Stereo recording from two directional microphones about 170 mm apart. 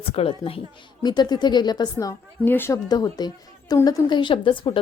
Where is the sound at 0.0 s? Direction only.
35° left (ahead or behind).